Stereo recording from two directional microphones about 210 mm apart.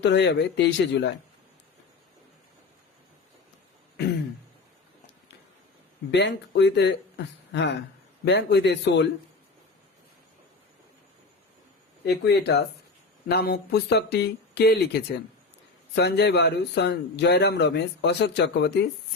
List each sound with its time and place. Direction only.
0.0 s speech: 55° left (ahead or behind)
6.1 s speech: 55° left (ahead or behind)
12.0 s a man's voice: 55° left (ahead or behind)